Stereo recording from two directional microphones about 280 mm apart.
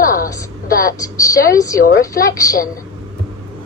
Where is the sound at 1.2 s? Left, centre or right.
Centre.